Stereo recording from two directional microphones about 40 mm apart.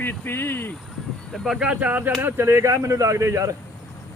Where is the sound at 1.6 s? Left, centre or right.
Right.